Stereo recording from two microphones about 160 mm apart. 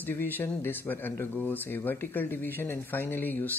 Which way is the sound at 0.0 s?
15° left (ahead or behind).